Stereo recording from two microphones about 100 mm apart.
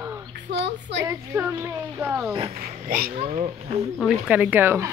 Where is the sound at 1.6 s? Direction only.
30° right (ahead or behind).